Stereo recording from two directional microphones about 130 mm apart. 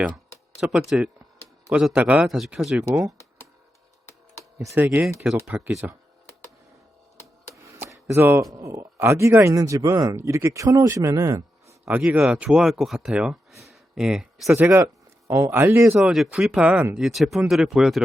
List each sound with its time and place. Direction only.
0.6 s speech: 5° right (ahead or behind)
2.8 s a man's voice: 20° right (ahead or behind)
4.4 s a sound: 20° right (ahead or behind)
4.9 s speech: 5° right (ahead or behind)
7.5 s chopping: 25° right (ahead or behind)
8.5 s a man's voice: 20° right (ahead or behind)
11.9 s speech: 10° right (ahead or behind)
14.5 s a man's voice: 15° right (ahead or behind)
16.0 s speech: centre (ahead or behind)